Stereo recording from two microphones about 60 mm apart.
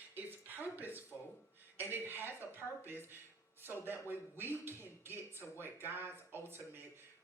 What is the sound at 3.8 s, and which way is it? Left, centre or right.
Speech, right.